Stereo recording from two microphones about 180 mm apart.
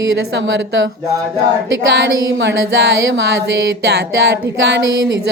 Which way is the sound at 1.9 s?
75° right (ahead or behind).